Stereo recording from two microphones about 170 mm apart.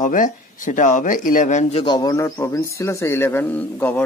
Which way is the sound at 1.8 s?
25° left (ahead or behind).